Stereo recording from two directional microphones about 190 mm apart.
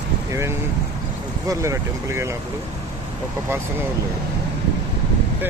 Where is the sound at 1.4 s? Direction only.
15° right (ahead or behind).